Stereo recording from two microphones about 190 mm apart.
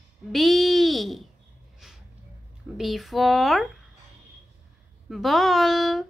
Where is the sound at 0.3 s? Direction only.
Centre (ahead or behind).